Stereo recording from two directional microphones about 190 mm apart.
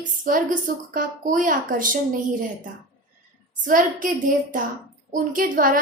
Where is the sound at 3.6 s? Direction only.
45° right (ahead or behind).